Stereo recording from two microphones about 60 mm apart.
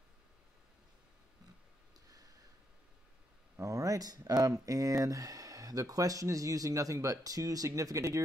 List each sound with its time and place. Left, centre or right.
3.5 s speech: right